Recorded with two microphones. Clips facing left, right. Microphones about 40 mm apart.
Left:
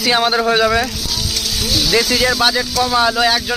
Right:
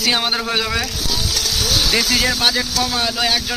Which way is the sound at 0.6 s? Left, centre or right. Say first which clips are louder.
Left 7 dB; centre.